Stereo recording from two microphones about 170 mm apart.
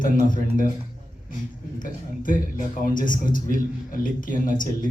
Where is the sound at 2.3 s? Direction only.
55° left (ahead or behind).